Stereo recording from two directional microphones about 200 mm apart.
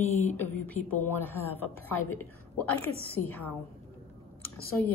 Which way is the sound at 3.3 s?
10° left (ahead or behind).